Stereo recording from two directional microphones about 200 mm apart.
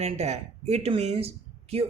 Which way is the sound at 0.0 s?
35° right (ahead or behind).